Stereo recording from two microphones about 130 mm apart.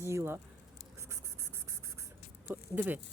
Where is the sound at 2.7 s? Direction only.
15° right (ahead or behind).